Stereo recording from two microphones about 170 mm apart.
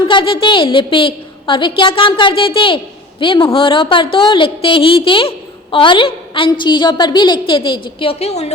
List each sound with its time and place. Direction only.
0.0 s a woman's voice: 25° left (ahead or behind)